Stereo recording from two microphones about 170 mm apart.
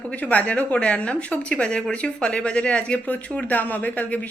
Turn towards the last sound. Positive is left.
turn(degrees=10)  # may be behind; listen again after turning